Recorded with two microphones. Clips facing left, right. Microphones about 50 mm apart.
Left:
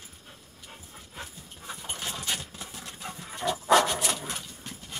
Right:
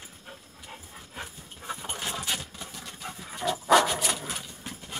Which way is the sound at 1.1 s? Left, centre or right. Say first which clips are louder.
Right 2 dB; centre.